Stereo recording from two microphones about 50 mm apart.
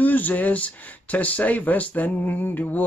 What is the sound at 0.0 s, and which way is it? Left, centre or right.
Speech, left.